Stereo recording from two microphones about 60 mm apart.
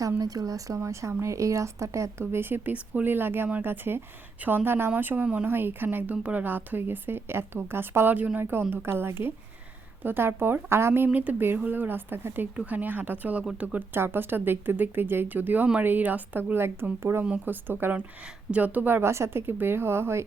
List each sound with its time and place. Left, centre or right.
0.2 s a woman's voice: right
0.8 s a woman's voice: right
5.5 s a woman's voice: right
11.1 s a woman's voice: right
17.4 s a woman's voice: right
19.0 s a woman's voice: right